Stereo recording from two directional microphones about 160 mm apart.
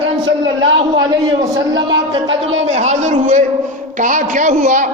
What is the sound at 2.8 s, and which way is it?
A man's voice, 50° right (ahead or behind).